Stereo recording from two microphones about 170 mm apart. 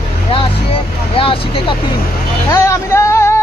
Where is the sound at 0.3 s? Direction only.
35° left (ahead or behind).